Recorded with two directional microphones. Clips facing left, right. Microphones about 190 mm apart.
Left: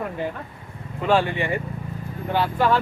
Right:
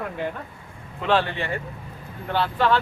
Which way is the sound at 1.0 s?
10° left (ahead or behind).